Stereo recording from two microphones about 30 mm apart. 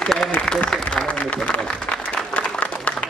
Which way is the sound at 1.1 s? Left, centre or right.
Left.